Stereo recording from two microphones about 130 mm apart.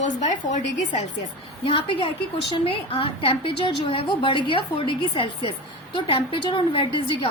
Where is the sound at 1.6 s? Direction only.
40° left (ahead or behind).